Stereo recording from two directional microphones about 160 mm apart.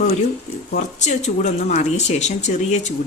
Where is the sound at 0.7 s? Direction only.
45° left (ahead or behind).